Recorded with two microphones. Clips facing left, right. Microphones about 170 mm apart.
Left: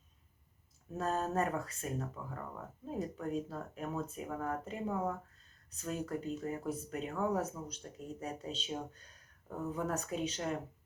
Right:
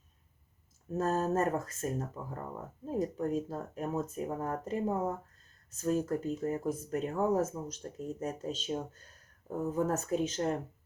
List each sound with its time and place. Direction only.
0.9 s speech: 40° right (ahead or behind)
9.7 s speech: 40° right (ahead or behind)